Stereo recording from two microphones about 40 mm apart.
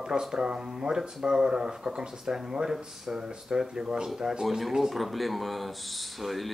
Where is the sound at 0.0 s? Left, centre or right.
Centre.